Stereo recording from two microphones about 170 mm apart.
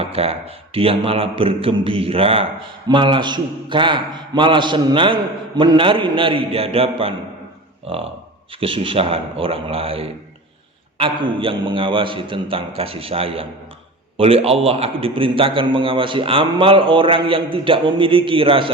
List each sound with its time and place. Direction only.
0.0 s a man's voice: 35° right (ahead or behind)